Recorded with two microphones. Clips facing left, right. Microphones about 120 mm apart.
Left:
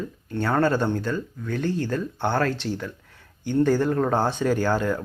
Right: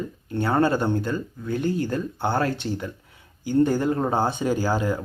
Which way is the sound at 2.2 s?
15° right (ahead or behind).